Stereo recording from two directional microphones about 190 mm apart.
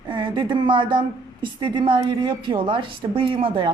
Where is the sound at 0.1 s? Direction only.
25° right (ahead or behind).